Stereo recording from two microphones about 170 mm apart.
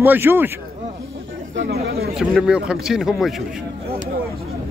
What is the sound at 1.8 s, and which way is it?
Speech, 65° right (ahead or behind).